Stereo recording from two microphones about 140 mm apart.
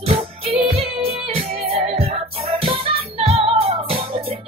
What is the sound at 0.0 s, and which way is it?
Music, 40° right (ahead or behind).